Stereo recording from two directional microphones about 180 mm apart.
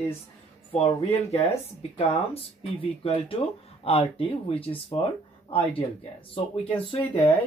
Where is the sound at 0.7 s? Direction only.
35° left (ahead or behind).